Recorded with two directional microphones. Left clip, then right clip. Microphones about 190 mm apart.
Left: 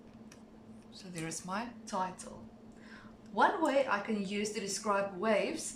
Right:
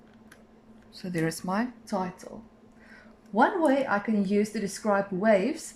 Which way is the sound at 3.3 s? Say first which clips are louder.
Right 5 dB; 40° right (ahead or behind).